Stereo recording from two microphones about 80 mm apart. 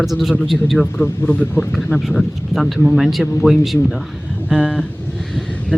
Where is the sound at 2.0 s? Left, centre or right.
Centre.